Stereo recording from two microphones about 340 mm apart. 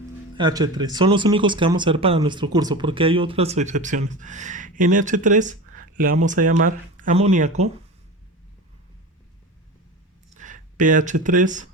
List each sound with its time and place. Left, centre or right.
0.3 s speech: centre
10.3 s speech: right